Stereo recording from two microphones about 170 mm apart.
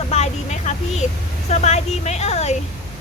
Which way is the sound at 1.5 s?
40° left (ahead or behind).